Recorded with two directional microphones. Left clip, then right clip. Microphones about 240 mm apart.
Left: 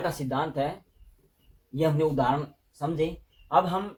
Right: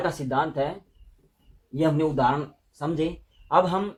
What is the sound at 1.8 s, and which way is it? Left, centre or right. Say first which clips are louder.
Speech: right 2 dB; right.